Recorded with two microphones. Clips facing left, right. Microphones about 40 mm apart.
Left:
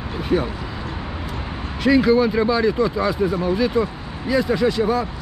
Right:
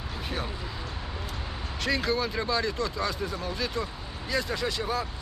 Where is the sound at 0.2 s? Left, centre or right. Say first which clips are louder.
Left 14 dB; centre.